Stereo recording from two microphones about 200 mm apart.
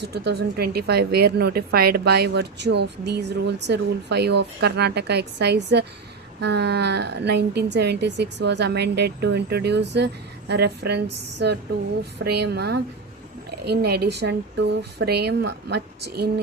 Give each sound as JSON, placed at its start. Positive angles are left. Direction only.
{"t": 0.0, "sound": "a woman's voice", "side_deg": -55}